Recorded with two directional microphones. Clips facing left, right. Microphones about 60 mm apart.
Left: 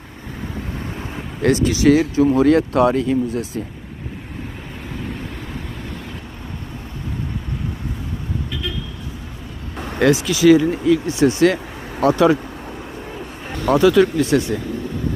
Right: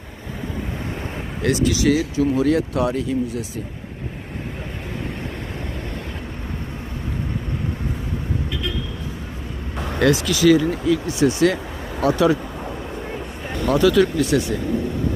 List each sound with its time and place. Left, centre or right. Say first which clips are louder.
1.5 s speech: left 4 dB; left
10.0 s speech: left 2 dB; left
10.8 s speech: left 3 dB; left
13.7 s speech: left 3 dB; left